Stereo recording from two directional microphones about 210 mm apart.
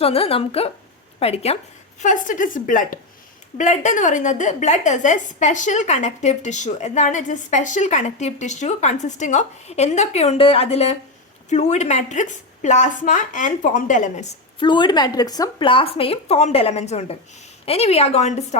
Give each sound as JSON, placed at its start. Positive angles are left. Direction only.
{"t": 0.0, "sound": "a woman's voice", "side_deg": 25}
{"t": 14.6, "sound": "speech", "side_deg": 20}